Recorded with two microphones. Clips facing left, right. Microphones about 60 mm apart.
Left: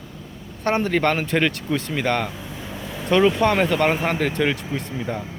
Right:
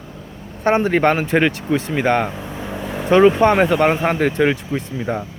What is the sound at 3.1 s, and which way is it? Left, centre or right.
Speech, right.